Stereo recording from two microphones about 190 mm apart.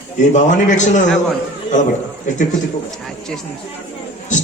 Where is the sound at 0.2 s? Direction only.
40° left (ahead or behind).